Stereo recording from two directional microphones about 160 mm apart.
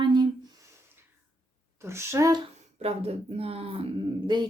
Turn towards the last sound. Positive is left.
turn(degrees=-25)  # may be behind; listen again after turning